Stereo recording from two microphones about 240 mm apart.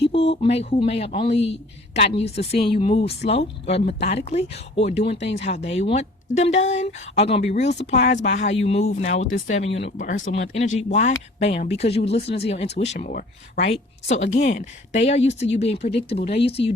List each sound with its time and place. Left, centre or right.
0.4 s a woman's voice: left